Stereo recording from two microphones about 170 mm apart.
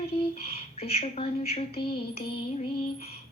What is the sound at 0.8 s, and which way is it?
A woman's voice, 35° left (ahead or behind).